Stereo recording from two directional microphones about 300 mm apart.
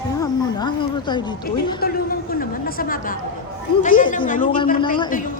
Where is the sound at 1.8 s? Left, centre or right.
Left.